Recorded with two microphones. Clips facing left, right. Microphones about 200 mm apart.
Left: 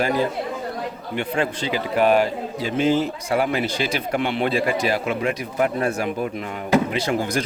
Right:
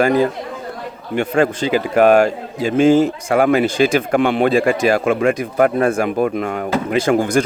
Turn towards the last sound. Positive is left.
turn(degrees=-60)  # may be behind; listen again after turning